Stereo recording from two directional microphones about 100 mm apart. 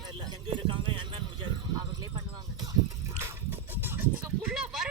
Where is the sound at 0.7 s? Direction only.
60° right (ahead or behind).